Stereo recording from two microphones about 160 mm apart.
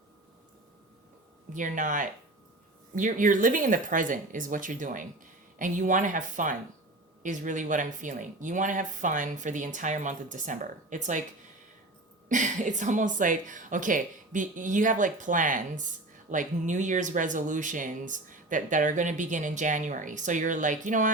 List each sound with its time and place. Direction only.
1.5 s speech: 55° right (ahead or behind)
12.3 s speech: 50° right (ahead or behind)